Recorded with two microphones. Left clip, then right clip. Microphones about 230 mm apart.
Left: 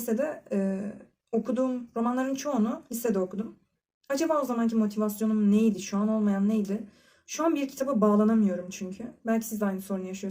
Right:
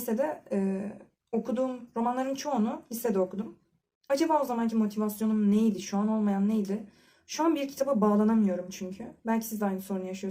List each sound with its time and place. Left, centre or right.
0.0 s speech: centre